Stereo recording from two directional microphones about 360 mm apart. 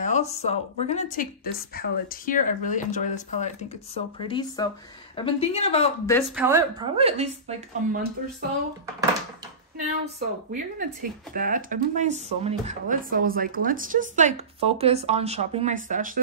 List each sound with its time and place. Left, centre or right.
0.0 s speech: centre
6.3 s a woman's voice: centre
10.5 s speech: right